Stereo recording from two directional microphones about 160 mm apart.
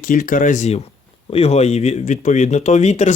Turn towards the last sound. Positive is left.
turn(degrees=45)  # may be behind; listen again after turning